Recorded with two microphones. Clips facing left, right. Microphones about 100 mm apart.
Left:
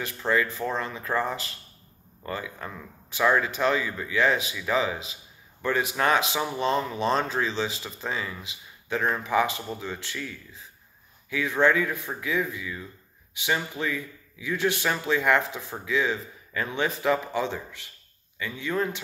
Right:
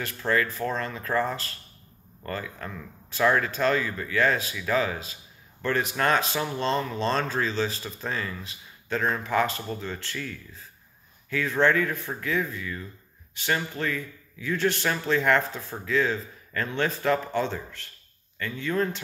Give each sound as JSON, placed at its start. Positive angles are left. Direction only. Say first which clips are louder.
{"t": 0.0, "sound": "speech", "louder": "even", "side_deg": 15}